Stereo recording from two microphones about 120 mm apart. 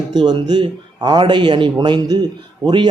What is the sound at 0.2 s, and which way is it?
Speech, 40° right (ahead or behind).